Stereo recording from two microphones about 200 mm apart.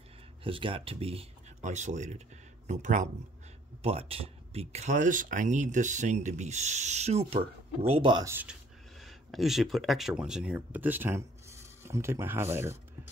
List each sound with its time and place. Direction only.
0.4 s speech: 25° right (ahead or behind); by 8.5 s 10° right (ahead or behind)
9.0 s speech: centre (ahead or behind)